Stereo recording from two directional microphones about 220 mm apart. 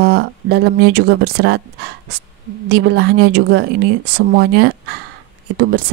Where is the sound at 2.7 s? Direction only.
50° right (ahead or behind).